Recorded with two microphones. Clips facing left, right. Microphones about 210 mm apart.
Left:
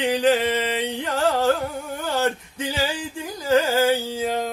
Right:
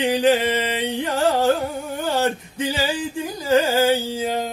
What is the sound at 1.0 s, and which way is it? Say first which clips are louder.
Music: right 2 dB; 10° right (ahead or behind).